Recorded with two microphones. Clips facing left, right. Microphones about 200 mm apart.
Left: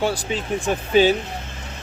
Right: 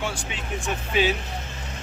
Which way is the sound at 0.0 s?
35° left (ahead or behind).